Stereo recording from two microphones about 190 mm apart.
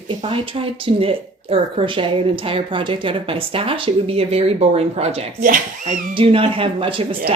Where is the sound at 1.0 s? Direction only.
30° right (ahead or behind).